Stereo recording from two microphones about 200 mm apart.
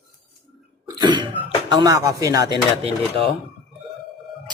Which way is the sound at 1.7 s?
20° right (ahead or behind).